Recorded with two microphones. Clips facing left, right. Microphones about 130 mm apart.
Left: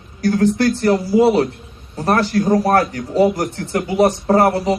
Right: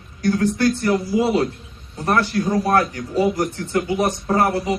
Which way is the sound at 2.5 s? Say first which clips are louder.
Left 1 dB; 30° left (ahead or behind).